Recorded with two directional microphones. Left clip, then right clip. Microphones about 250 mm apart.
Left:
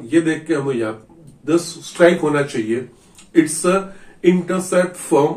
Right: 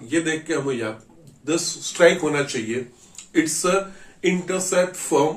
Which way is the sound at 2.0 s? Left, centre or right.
Right.